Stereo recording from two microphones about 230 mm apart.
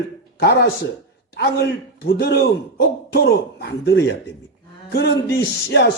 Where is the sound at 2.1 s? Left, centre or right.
Left.